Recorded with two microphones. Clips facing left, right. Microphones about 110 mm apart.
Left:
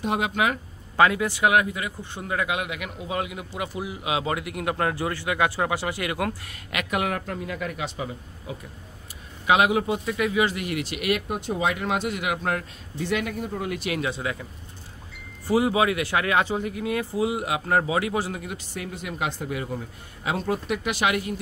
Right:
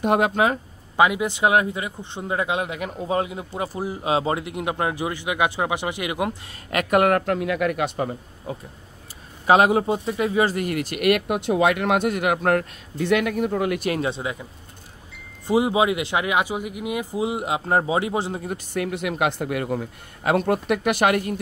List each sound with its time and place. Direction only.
0.0 s speech: 50° right (ahead or behind)
0.9 s speech: 15° right (ahead or behind)
6.7 s a man's voice: 45° right (ahead or behind)
9.5 s speech: 40° right (ahead or behind); by 13.7 s 70° right (ahead or behind)
13.7 s speech: 45° right (ahead or behind)
14.0 s speech: 25° right (ahead or behind)
18.5 s a man's voice: 55° right (ahead or behind)